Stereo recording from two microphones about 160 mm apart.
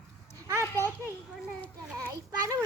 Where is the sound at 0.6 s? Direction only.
15° left (ahead or behind).